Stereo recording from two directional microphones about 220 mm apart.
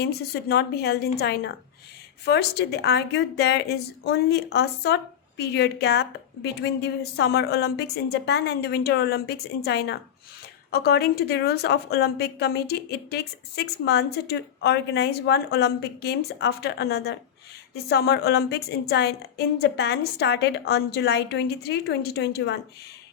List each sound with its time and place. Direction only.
0.0 s a woman's voice: 45° left (ahead or behind)